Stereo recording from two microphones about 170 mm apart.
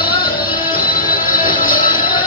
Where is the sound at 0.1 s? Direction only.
30° left (ahead or behind).